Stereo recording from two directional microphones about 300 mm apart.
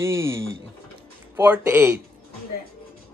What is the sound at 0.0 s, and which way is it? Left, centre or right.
Speech, centre.